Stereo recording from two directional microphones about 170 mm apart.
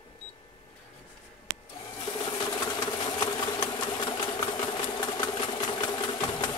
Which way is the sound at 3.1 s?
30° left (ahead or behind).